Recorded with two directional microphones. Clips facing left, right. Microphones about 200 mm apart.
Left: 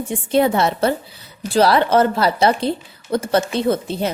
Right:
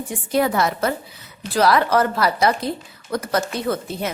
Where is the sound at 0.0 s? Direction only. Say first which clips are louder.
Left 4 dB; 25° left (ahead or behind).